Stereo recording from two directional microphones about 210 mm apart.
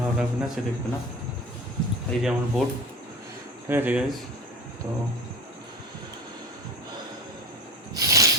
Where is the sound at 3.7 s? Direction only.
10° right (ahead or behind).